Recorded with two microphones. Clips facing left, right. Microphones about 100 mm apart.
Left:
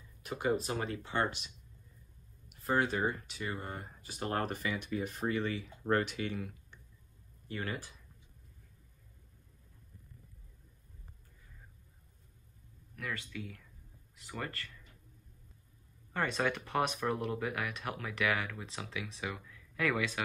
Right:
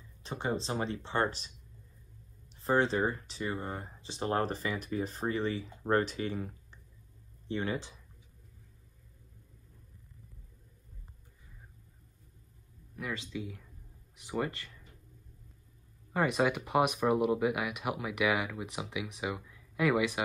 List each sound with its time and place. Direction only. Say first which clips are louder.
0.2 s speech: left 2 dB; 30° right (ahead or behind)
2.5 s speech: right 3 dB; 30° right (ahead or behind)
7.4 s speech: right 5 dB; 25° right (ahead or behind)
12.9 s speech: right 3 dB; 20° right (ahead or behind)
16.1 s speech: right 4 dB; 10° right (ahead or behind)